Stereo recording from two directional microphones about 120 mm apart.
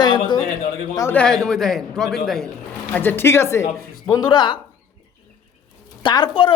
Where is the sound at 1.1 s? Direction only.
5° left (ahead or behind).